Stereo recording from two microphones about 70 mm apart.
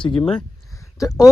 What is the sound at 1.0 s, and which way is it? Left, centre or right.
Speech, left.